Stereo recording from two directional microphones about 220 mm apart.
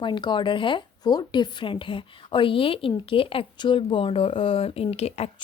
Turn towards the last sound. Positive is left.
turn(degrees=30)  # may be behind; listen again after turning